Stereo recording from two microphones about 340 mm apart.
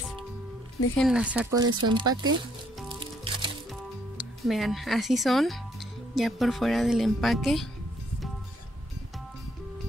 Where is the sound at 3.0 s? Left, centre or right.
Centre.